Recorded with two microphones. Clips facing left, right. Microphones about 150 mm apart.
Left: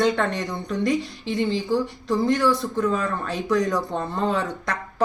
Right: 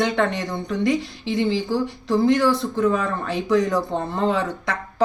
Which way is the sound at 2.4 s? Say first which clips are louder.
Right 2 dB; 25° right (ahead or behind).